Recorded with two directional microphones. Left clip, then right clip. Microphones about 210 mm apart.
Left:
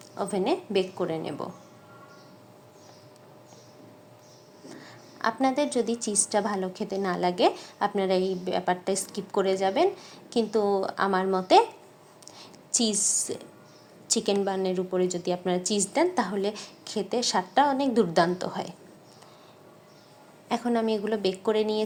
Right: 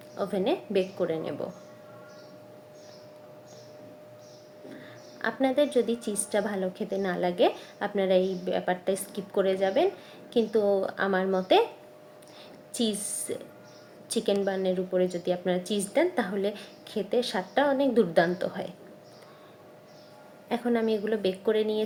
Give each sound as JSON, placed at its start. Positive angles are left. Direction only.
{"t": 0.2, "sound": "speech", "side_deg": 30}
{"t": 4.7, "sound": "speech", "side_deg": 30}
{"t": 12.7, "sound": "speech", "side_deg": 30}
{"t": 20.5, "sound": "speech", "side_deg": 30}